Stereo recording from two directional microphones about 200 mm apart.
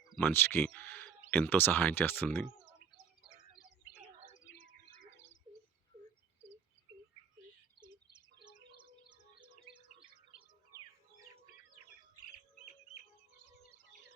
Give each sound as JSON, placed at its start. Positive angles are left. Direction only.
{"t": 0.2, "sound": "speech", "side_deg": 10}
{"t": 4.6, "sound": "bird", "side_deg": 65}
{"t": 7.8, "sound": "a sound", "side_deg": -20}